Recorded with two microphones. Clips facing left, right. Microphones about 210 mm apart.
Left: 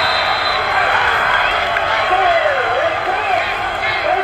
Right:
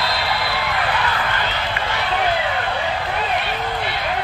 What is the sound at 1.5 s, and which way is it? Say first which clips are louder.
Run: left 5 dB; 55° left (ahead or behind).